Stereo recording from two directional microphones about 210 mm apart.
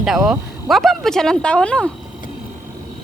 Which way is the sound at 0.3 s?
Centre (ahead or behind).